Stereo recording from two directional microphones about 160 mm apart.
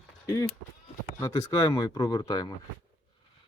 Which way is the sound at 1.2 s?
20° left (ahead or behind).